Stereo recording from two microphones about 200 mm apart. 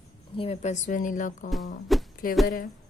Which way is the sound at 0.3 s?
30° left (ahead or behind).